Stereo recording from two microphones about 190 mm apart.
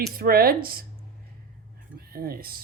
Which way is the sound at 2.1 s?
50° right (ahead or behind).